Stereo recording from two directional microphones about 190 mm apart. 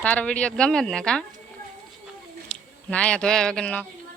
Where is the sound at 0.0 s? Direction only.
5° left (ahead or behind).